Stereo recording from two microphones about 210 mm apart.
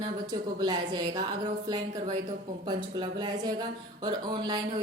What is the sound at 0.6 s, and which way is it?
Speech, 20° right (ahead or behind).